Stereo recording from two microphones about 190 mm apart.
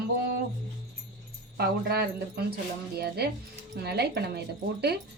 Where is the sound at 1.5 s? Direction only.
55° right (ahead or behind).